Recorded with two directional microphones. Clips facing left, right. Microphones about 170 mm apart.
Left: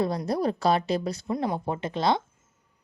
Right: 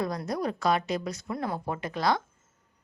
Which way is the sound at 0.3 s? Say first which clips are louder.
Left 2 dB; 30° left (ahead or behind).